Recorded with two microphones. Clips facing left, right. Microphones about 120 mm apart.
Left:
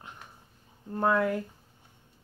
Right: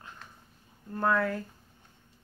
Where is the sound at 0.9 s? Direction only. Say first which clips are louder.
Left 2 dB; 20° left (ahead or behind).